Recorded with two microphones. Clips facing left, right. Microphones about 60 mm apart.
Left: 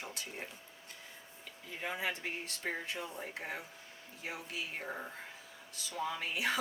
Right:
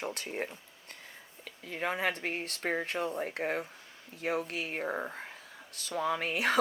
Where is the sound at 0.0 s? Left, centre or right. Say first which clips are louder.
Right 8 dB; right.